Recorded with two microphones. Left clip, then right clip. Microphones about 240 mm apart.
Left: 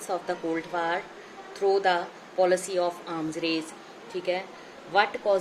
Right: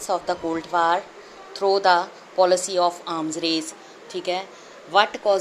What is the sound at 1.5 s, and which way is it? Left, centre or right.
Speech, centre.